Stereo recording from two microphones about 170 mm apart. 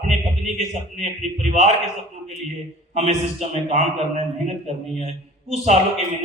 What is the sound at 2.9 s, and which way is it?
A man's voice, 40° right (ahead or behind).